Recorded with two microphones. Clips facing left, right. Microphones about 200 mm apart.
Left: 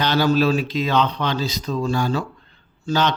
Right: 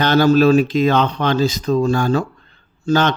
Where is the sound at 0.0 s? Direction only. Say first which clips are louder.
Right 6 dB; 50° right (ahead or behind).